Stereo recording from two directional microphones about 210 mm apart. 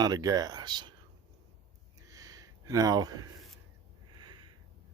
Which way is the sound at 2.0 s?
15° right (ahead or behind).